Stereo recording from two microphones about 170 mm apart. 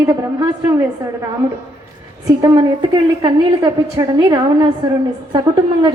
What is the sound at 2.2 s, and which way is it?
A woman's voice, 20° right (ahead or behind).